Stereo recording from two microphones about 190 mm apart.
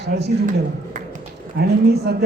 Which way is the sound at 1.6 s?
60° right (ahead or behind).